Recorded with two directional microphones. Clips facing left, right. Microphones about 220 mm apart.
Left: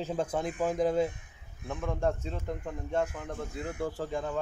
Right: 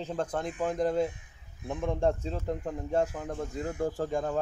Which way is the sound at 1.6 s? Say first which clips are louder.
Right 3 dB; 25° right (ahead or behind).